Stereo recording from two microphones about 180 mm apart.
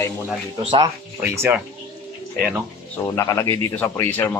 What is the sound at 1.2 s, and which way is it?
Speech, 10° right (ahead or behind).